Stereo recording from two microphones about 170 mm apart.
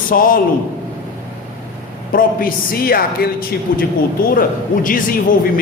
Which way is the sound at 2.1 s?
60° left (ahead or behind).